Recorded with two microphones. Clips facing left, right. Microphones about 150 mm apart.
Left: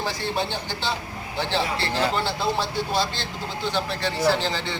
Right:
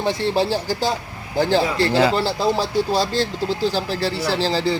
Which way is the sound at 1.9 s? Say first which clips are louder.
Right 8 dB; 90° right.